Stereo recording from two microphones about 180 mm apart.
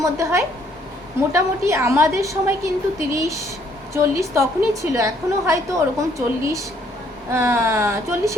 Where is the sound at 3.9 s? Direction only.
15° right (ahead or behind).